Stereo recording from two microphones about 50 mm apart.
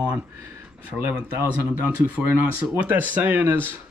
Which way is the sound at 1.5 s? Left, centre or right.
Right.